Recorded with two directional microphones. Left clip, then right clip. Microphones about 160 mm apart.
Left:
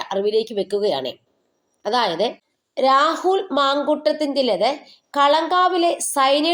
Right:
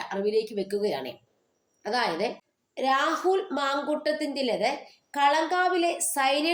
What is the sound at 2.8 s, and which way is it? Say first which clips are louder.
A woman's voice: left 9 dB; 25° left (ahead or behind).